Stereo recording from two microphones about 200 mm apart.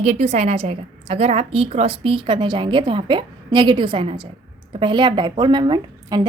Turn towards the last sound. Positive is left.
turn(degrees=-20)  # may be behind; listen again after turning